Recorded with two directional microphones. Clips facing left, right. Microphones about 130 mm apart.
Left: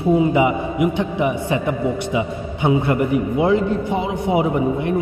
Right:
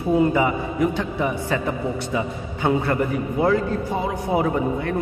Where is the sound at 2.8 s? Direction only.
20° left (ahead or behind).